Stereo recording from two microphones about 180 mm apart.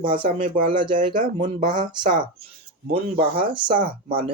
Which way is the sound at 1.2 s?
45° right (ahead or behind).